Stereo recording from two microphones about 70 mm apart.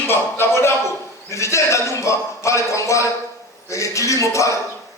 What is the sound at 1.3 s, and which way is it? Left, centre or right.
A man's voice, left.